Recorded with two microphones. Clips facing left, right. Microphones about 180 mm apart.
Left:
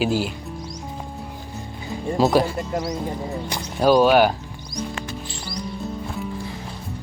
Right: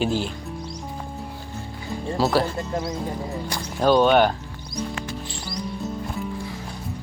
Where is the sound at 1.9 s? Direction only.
15° left (ahead or behind).